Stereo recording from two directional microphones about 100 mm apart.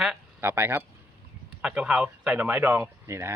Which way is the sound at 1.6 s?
10° right (ahead or behind).